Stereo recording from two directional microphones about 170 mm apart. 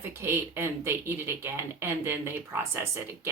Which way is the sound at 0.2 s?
15° right (ahead or behind).